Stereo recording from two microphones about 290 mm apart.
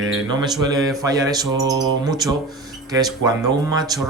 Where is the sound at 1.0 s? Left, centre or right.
Centre.